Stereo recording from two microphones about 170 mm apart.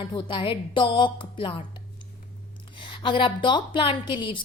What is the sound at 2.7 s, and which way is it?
A woman's voice, 30° left (ahead or behind).